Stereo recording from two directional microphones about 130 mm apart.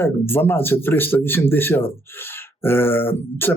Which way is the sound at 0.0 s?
15° left (ahead or behind).